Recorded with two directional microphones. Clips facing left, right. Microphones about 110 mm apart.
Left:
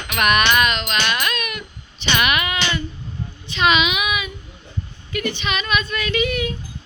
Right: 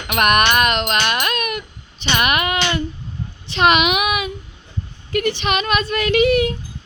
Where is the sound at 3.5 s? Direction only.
55° right (ahead or behind).